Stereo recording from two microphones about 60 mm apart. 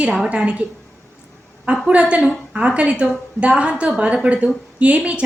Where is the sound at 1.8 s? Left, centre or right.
Centre.